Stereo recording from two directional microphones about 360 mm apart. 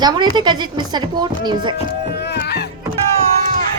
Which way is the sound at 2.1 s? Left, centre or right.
Left.